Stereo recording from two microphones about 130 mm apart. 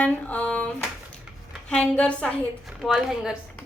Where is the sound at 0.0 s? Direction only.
10° left (ahead or behind).